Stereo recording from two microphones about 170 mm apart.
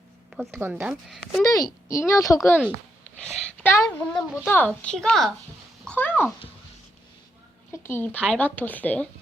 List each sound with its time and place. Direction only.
0.5 s a woman's voice: 15° right (ahead or behind)
1.4 s speech: 20° left (ahead or behind)
3.2 s a woman's voice: 5° left (ahead or behind)
5.8 s a sound: 10° left (ahead or behind)
7.7 s speech: 15° left (ahead or behind)